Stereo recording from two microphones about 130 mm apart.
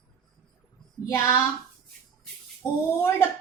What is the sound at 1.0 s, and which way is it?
Child singing, 25° left (ahead or behind).